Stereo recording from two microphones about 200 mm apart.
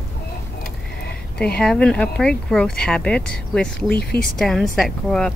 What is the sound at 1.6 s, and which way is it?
Speech, 5° left (ahead or behind).